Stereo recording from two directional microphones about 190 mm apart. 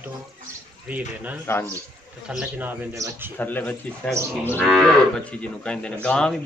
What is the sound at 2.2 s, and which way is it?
Speech, 5° right (ahead or behind).